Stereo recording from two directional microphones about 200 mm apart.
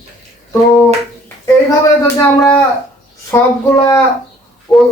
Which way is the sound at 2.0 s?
10° left (ahead or behind).